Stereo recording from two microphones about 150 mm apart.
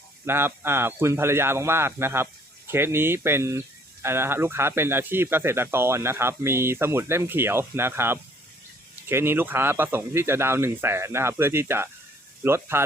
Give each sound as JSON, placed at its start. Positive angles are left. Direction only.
{"t": 0.3, "sound": "speech", "side_deg": -15}